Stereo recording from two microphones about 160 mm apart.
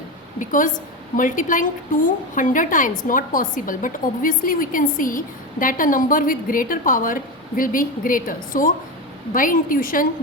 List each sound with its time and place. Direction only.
0.3 s a woman's voice: 60° left (ahead or behind)